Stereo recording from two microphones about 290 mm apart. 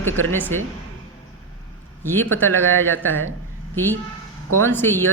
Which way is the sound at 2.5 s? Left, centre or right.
Right.